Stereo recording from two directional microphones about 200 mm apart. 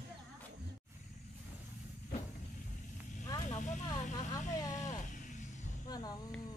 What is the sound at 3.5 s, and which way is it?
Vehicle, 40° left (ahead or behind).